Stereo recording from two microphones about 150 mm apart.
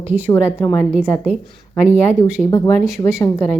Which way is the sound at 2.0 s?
15° left (ahead or behind).